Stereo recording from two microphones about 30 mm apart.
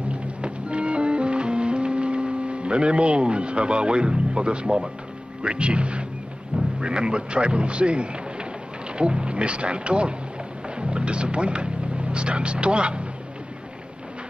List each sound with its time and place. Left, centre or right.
0.1 s music: right
5.4 s a man's voice: right